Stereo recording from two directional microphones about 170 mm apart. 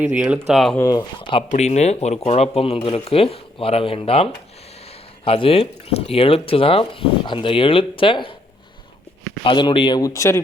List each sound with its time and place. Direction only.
0.0 s speech: 5° right (ahead or behind)
0.8 s speech: 20° left (ahead or behind)
1.5 s speech: 40° left (ahead or behind)
9.4 s speech: 30° left (ahead or behind)